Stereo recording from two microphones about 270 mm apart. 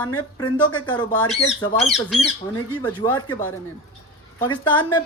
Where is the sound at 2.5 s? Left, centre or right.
Centre.